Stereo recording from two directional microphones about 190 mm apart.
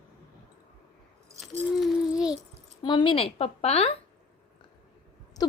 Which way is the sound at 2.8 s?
25° left (ahead or behind).